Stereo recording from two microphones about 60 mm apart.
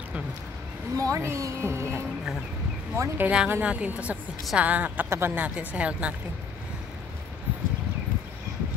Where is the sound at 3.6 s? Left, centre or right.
Right.